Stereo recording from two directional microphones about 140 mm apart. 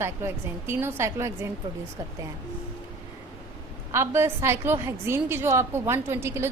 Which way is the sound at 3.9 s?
20° right (ahead or behind).